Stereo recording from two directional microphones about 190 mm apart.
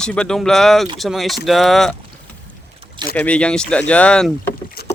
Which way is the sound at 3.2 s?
5° left (ahead or behind).